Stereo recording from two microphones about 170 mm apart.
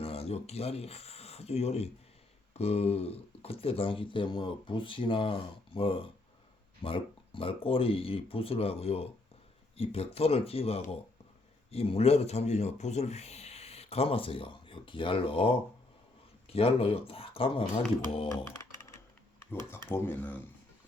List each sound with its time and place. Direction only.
0.0 s speech: 35° left (ahead or behind)
19.9 s speech: 10° left (ahead or behind)